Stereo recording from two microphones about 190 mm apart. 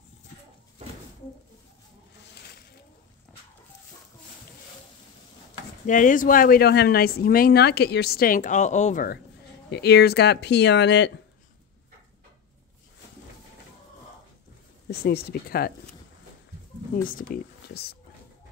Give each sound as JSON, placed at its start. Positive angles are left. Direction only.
{"t": 5.9, "sound": "speech", "side_deg": 45}
{"t": 9.7, "sound": "speech", "side_deg": 60}
{"t": 14.9, "sound": "speech", "side_deg": 55}
{"t": 17.1, "sound": "speech", "side_deg": 55}